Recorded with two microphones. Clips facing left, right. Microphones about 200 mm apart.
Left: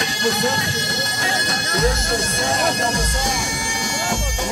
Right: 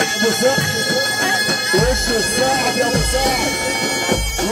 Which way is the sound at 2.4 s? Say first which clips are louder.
Right 5 dB; 60° right (ahead or behind).